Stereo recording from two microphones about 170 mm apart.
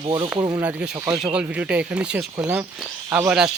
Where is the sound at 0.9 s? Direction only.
20° right (ahead or behind).